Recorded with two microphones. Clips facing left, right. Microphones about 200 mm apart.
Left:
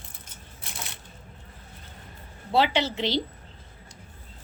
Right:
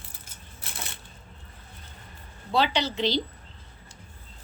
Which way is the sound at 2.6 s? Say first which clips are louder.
Even; 25° left (ahead or behind).